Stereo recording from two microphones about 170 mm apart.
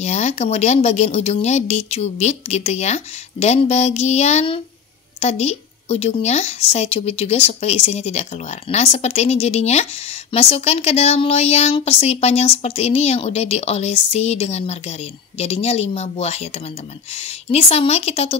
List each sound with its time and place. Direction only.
0.0 s a woman's voice: 40° left (ahead or behind)